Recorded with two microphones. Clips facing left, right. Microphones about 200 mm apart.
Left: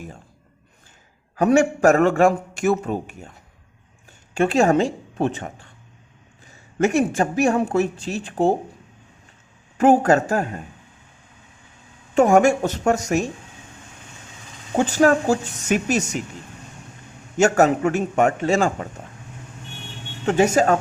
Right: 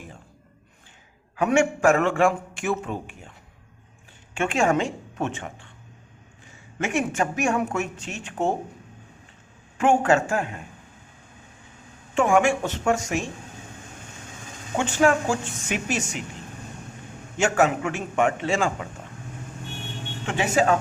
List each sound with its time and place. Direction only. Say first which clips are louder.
1.4 s a man's voice: left 4 dB; 40° left (ahead or behind)
4.4 s speech: left 5 dB; 35° left (ahead or behind)
6.7 s a man's voice: left 6 dB; 40° left (ahead or behind)
9.7 s a man's voice: left 4 dB; 40° left (ahead or behind)
12.1 s a man's voice: left 5 dB; 40° left (ahead or behind)
14.8 s a man's voice: left 4 dB; 40° left (ahead or behind)
17.3 s a man's voice: left 5 dB; 40° left (ahead or behind)
20.2 s speech: left 5 dB; 40° left (ahead or behind)